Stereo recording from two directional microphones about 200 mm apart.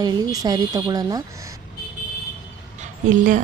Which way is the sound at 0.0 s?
20° right (ahead or behind).